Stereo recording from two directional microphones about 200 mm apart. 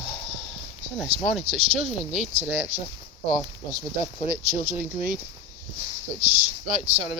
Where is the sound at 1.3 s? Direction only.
Centre (ahead or behind).